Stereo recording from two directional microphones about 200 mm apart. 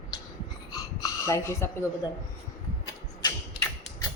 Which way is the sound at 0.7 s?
15° left (ahead or behind).